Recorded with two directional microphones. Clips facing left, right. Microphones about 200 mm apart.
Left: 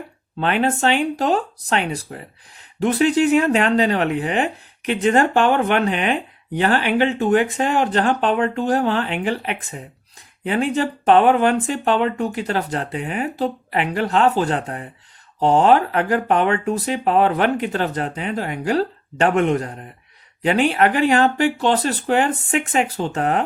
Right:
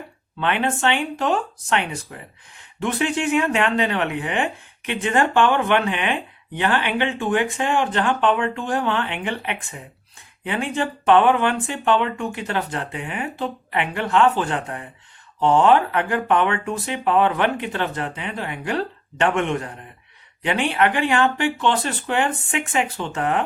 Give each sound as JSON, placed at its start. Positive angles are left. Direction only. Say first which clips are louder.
{"t": 0.3, "sound": "speech", "louder": "left 3 dB", "side_deg": 40}